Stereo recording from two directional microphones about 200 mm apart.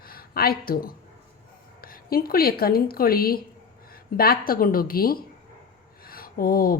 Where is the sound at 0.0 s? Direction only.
50° left (ahead or behind).